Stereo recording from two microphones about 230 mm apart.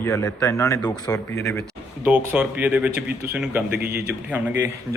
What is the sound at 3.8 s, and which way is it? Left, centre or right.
Speech, right.